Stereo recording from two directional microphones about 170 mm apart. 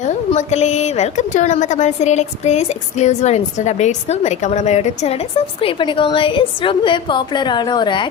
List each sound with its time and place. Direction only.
0.0 s a woman's voice: 40° left (ahead or behind)
5.6 s a woman's voice: 30° left (ahead or behind)